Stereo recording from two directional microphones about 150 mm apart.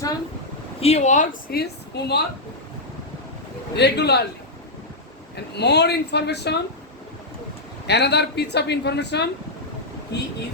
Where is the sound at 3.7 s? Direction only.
90° left.